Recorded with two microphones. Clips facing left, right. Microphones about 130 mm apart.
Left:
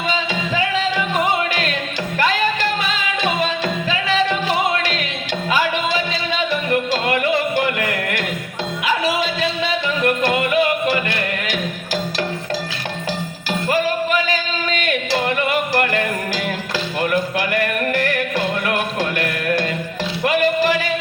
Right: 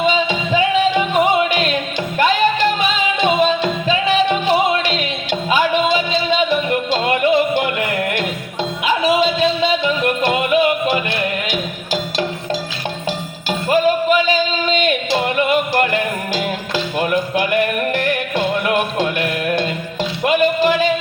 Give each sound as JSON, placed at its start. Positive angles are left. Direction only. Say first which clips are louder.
{"t": 0.0, "sound": "music", "louder": "right 5 dB", "side_deg": -20}
{"t": 13.7, "sound": "a sound", "louder": "right 5 dB", "side_deg": -20}
{"t": 20.2, "sound": "music", "louder": "right 2 dB", "side_deg": -20}